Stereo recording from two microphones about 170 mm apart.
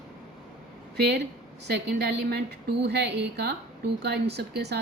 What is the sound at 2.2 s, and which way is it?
A woman's voice, 75° right (ahead or behind).